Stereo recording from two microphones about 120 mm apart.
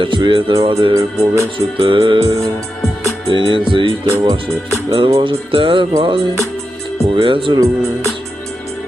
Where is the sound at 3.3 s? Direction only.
45° right (ahead or behind).